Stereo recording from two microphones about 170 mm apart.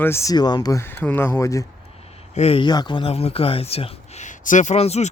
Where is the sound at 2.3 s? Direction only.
35° left (ahead or behind).